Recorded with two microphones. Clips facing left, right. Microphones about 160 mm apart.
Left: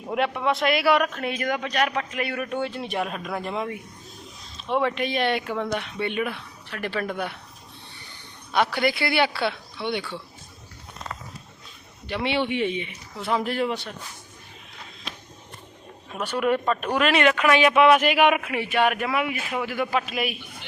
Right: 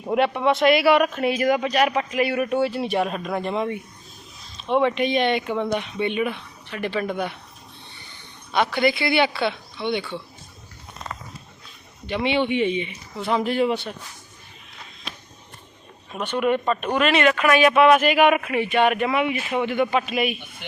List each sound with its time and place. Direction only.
0.1 s speech: centre (ahead or behind)
8.5 s speech: 10° left (ahead or behind)
12.2 s speech: 5° left (ahead or behind)
16.1 s speech: 5° left (ahead or behind)